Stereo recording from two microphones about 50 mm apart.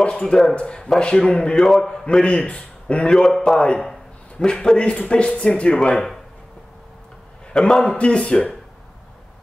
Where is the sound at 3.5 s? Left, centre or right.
Left.